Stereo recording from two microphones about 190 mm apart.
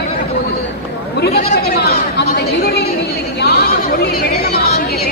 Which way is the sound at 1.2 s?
60° left (ahead or behind).